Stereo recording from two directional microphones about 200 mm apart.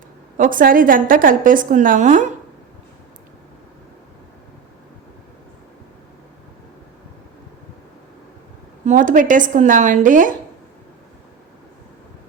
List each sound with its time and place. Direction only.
0.3 s a woman's voice: 40° right (ahead or behind)
8.9 s speech: 40° right (ahead or behind)